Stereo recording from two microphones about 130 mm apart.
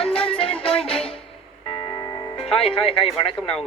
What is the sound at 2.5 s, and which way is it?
Music, 45° left (ahead or behind).